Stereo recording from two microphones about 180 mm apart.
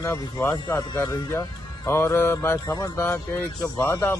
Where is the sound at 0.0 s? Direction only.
15° left (ahead or behind).